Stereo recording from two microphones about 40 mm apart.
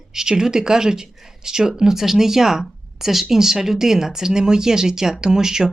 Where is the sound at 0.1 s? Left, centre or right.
Centre.